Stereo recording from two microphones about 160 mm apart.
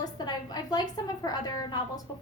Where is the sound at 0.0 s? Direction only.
25° left (ahead or behind).